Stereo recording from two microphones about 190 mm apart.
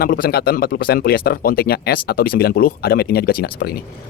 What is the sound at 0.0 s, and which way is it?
Speech, 55° left (ahead or behind).